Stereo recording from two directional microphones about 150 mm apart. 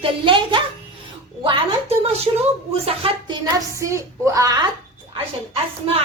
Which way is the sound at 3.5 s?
20° right (ahead or behind).